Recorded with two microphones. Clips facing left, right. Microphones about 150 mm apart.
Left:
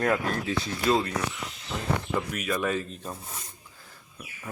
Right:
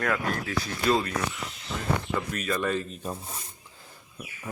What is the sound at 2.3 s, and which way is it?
Speech, 10° left (ahead or behind).